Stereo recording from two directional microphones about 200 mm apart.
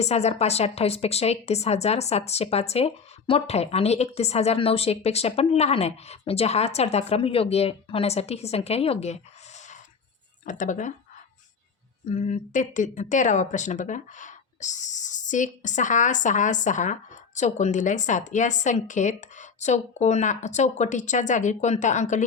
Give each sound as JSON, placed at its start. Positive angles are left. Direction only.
{"t": 0.0, "sound": "speech", "side_deg": 35}
{"t": 10.4, "sound": "speech", "side_deg": 40}
{"t": 12.0, "sound": "speech", "side_deg": 35}